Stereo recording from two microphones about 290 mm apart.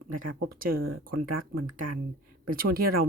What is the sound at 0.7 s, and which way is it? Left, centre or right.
Speech, right.